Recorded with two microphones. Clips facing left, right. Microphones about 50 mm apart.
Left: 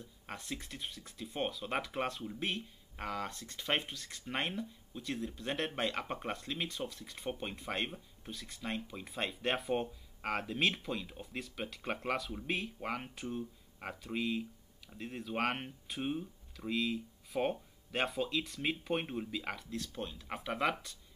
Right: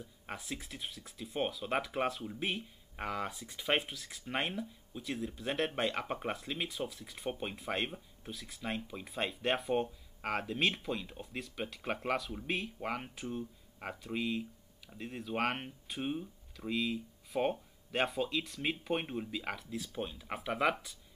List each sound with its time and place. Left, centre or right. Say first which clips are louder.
0.0 s speech: right 2 dB; centre